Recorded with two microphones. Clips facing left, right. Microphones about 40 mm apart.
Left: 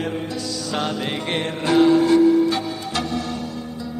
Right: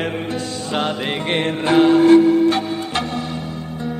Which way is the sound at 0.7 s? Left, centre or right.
Right.